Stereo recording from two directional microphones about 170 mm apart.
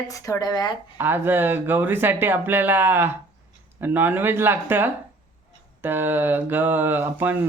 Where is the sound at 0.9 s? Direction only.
15° right (ahead or behind).